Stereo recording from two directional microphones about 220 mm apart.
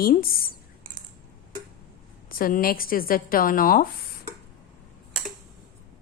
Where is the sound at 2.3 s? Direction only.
40° left (ahead or behind).